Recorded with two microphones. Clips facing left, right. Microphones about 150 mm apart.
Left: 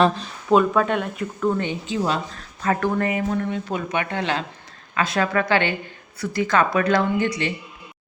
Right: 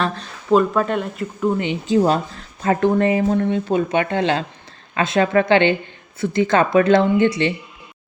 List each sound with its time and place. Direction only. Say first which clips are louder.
0.5 s speech: right 1 dB; centre (ahead or behind)
1.4 s speech: right 2 dB; 15° right (ahead or behind)
2.0 s speech: right 7 dB; 40° right (ahead or behind)
2.6 s speech: right 5 dB; 25° right (ahead or behind)